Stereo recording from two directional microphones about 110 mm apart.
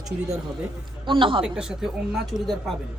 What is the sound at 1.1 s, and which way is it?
Speech, 50° right (ahead or behind).